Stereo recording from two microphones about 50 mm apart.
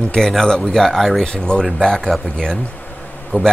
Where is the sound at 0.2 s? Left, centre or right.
Centre.